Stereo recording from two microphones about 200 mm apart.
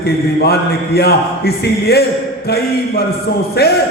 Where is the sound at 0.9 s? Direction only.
50° left (ahead or behind).